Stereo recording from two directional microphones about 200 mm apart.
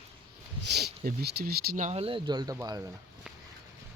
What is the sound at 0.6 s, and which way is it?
Speech, 55° right (ahead or behind).